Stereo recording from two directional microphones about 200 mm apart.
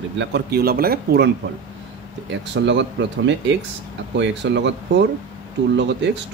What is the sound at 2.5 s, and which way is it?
Speech, 65° right (ahead or behind).